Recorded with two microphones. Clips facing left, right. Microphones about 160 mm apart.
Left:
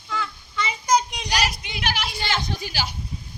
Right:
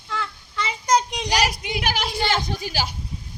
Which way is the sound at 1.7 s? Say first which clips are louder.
Right 3 dB; 50° right (ahead or behind).